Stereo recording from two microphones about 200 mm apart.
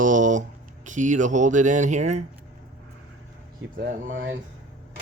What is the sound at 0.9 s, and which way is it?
Speech, 40° right (ahead or behind).